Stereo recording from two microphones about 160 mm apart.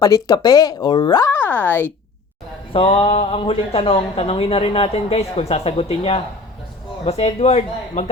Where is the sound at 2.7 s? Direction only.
35° left (ahead or behind).